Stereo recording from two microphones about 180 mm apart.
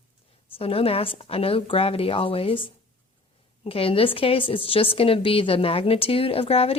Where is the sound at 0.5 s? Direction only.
30° left (ahead or behind).